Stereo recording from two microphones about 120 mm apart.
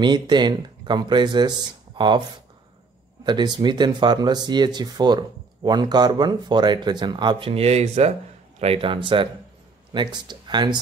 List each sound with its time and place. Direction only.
0.0 s speech: 40° right (ahead or behind)
3.3 s speech: 40° right (ahead or behind); by 8.1 s 65° right (ahead or behind)
8.5 s a man's voice: 55° right (ahead or behind); by 10.8 s 40° right (ahead or behind)